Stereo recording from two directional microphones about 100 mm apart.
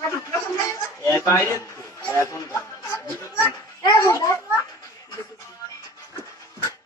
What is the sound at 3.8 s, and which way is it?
Children playing, 40° left (ahead or behind).